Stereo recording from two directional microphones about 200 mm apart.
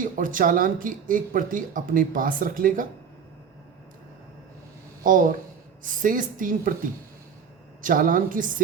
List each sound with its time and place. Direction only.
0.0 s speech: 40° right (ahead or behind)
5.0 s a woman's voice: 40° right (ahead or behind)
7.8 s speech: 45° right (ahead or behind)